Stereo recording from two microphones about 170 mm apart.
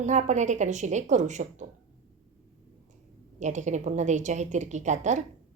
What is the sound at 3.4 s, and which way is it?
A woman's voice, 45° right (ahead or behind).